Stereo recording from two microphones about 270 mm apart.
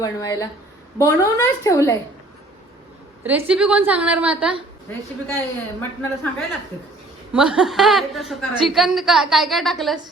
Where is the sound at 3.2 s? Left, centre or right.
Centre.